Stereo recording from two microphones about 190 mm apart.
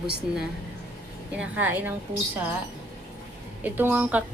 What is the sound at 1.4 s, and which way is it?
Speech, 10° right (ahead or behind).